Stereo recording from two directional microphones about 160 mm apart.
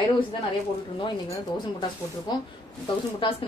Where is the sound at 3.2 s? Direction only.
30° left (ahead or behind).